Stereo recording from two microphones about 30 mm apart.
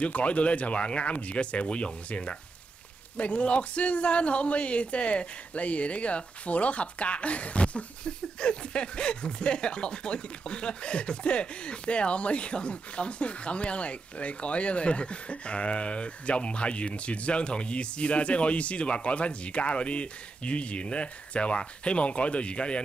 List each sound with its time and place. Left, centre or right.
0.0 s speech: left